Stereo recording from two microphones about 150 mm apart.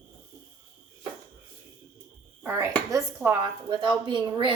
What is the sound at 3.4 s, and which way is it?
A woman's voice, 30° right (ahead or behind).